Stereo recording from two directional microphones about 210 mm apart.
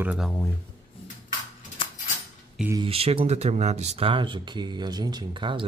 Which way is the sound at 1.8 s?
25° left (ahead or behind).